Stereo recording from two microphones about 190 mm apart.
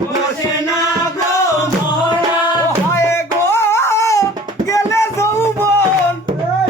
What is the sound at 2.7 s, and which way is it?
Music, 15° left (ahead or behind).